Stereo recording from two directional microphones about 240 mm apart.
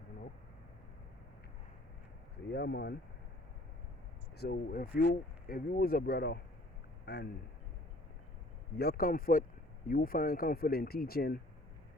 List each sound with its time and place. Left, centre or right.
2.5 s speech: left
4.4 s speech: left
8.8 s speech: left